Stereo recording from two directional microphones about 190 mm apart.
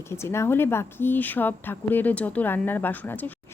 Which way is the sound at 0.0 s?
15° left (ahead or behind).